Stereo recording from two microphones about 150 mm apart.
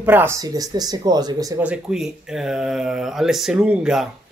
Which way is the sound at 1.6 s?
5° right (ahead or behind).